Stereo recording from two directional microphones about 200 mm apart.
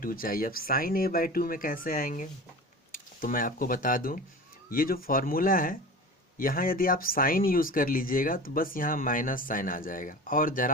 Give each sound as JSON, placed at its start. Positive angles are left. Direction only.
{"t": 0.0, "sound": "speech", "side_deg": 45}